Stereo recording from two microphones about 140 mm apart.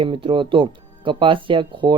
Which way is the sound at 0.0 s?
40° right (ahead or behind).